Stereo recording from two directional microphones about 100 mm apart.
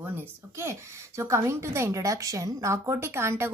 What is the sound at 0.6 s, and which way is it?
A woman's voice, 25° right (ahead or behind).